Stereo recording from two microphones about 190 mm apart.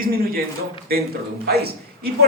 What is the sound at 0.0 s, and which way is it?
Speech, 50° right (ahead or behind).